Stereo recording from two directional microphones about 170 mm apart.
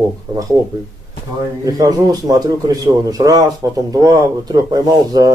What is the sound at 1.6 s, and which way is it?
Speech, 20° right (ahead or behind).